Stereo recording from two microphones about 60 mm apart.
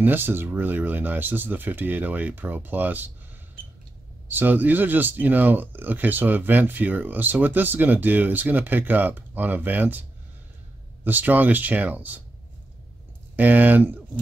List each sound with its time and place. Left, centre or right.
0.0 s speech: right
4.3 s speech: right
11.1 s speech: right
13.4 s speech: right